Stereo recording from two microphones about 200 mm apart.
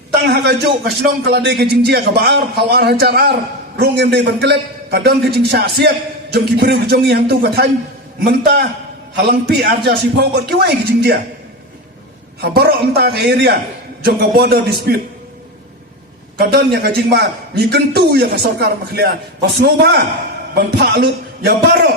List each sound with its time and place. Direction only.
0.1 s a man's voice: 55° right (ahead or behind)
12.4 s a man's voice: 50° right (ahead or behind)
16.4 s a man's voice: 55° right (ahead or behind)